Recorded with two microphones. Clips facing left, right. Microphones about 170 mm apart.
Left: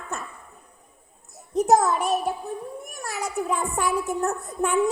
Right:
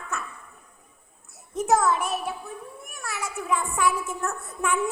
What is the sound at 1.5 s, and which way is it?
A child's voice, 35° left (ahead or behind).